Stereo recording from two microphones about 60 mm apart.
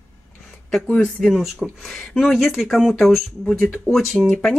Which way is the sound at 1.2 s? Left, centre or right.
Centre.